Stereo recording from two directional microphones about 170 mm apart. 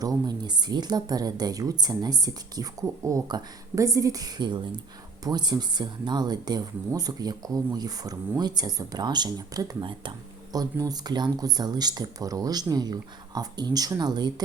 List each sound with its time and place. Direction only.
0.0 s speech: 25° right (ahead or behind)